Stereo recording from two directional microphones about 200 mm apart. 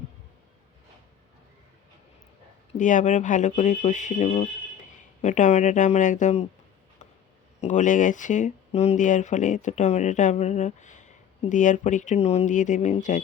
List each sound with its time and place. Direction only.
2.7 s speech: 40° left (ahead or behind)
7.6 s speech: 40° left (ahead or behind)